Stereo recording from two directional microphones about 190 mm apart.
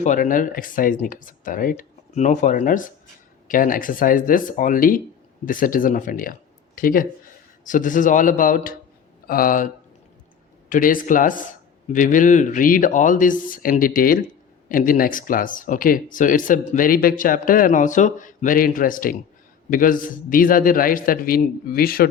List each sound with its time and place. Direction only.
0.0 s speech: 40° left (ahead or behind)